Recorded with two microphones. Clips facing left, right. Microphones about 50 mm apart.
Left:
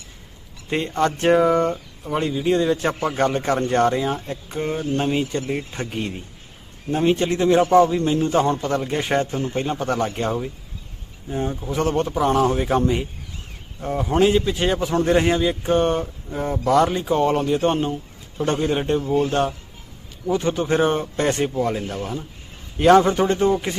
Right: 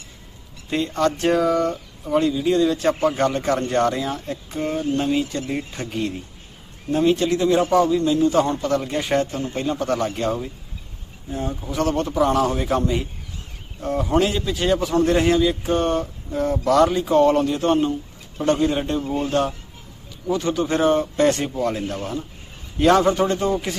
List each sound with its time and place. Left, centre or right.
0.7 s a man's voice: left
9.4 s a man's voice: left
21.6 s speech: centre
22.8 s a man's voice: centre